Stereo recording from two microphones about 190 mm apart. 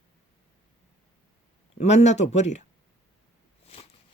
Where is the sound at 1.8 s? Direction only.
35° left (ahead or behind).